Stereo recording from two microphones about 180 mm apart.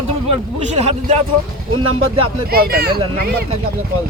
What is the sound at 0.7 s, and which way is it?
Speech, 35° right (ahead or behind).